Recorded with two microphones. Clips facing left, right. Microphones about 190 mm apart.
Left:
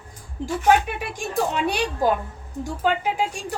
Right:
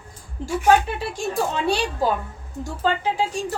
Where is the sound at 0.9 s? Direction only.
15° left (ahead or behind).